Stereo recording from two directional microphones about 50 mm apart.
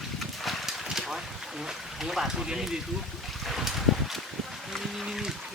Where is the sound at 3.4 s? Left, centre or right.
Centre.